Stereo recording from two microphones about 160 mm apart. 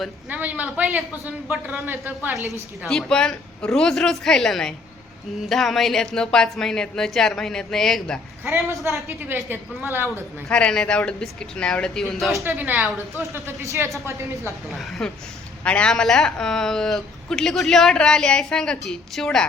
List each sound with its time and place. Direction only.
0.3 s a woman's voice: 10° right (ahead or behind)
2.8 s a woman's voice: centre (ahead or behind)
8.4 s a woman's voice: 15° right (ahead or behind)
10.5 s a woman's voice: 5° left (ahead or behind)
12.5 s a woman's voice: 10° right (ahead or behind)
13.3 s a woman's voice: 15° right (ahead or behind)
14.7 s a woman's voice: centre (ahead or behind)